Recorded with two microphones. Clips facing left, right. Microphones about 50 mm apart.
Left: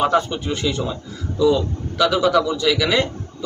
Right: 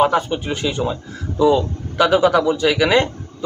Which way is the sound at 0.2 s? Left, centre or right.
Centre.